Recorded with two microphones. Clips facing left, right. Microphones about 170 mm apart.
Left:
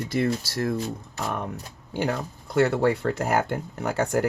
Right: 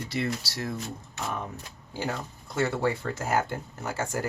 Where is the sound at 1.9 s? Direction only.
65° left (ahead or behind).